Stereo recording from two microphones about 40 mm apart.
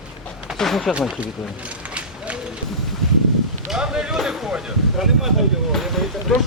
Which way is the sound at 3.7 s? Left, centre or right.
Centre.